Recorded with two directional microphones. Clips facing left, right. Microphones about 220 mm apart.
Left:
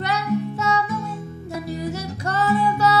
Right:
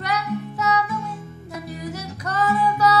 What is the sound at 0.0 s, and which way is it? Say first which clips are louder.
Music: left 3 dB; 25° left (ahead or behind).